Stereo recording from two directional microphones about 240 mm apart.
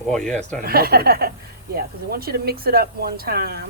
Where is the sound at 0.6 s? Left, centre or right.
Right.